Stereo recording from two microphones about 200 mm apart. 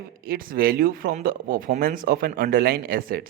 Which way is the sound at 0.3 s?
45° right (ahead or behind).